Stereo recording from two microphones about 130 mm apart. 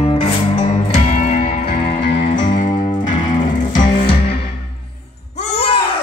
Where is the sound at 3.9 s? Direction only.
45° left (ahead or behind).